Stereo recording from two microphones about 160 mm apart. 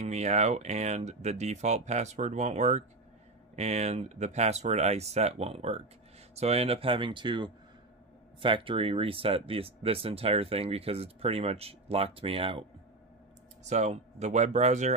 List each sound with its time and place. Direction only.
0.0 s speech: 45° right (ahead or behind)
13.7 s speech: 45° right (ahead or behind)